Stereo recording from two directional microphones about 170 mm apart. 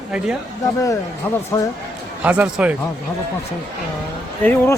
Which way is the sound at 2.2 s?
10° right (ahead or behind).